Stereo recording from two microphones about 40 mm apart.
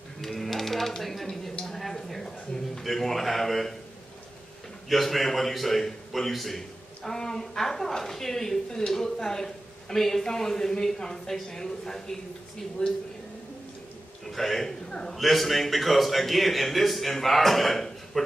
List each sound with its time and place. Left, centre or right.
0.2 s a sound: centre
4.8 s a man's voice: centre
12.8 s speech: left
14.2 s a man's voice: centre
14.9 s a man's voice: left
15.1 s a man's voice: centre